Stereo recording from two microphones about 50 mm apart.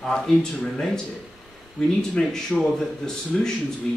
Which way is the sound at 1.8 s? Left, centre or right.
Centre.